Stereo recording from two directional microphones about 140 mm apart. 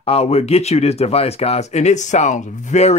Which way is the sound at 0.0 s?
45° left (ahead or behind).